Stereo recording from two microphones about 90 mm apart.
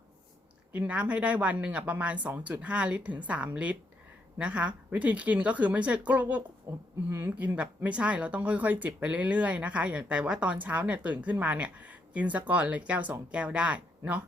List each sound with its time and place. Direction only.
0.7 s speech: 15° right (ahead or behind)
6.7 s speech: 35° right (ahead or behind)
7.1 s speech: 25° right (ahead or behind)